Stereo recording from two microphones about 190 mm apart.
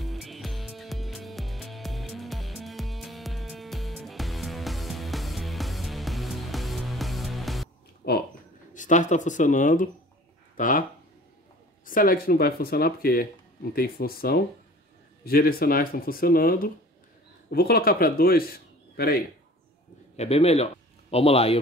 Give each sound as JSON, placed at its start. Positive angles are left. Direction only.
{"t": 0.0, "sound": "music", "side_deg": 0}
{"t": 8.0, "sound": "a sound", "side_deg": 60}
{"t": 8.7, "sound": "a man's voice", "side_deg": 40}
{"t": 20.2, "sound": "a man's voice", "side_deg": 35}